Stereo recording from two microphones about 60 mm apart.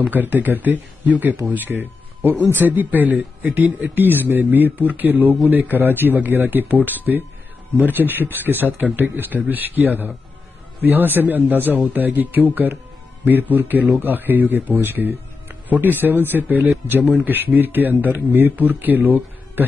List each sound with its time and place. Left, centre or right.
0.1 s speech: right